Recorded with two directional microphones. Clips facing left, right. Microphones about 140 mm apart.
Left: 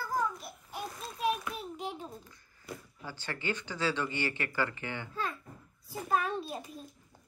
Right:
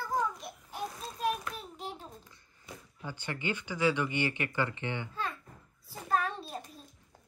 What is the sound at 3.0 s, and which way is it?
Speech, 20° right (ahead or behind).